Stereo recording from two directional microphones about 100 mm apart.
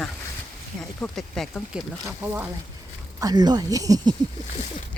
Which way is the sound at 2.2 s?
20° right (ahead or behind).